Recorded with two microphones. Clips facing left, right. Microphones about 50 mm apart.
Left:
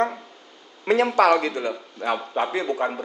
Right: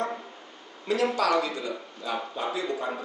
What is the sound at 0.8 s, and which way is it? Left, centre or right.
A man's voice, left.